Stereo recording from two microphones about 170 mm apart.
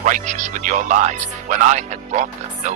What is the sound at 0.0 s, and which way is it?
Speech, 45° right (ahead or behind).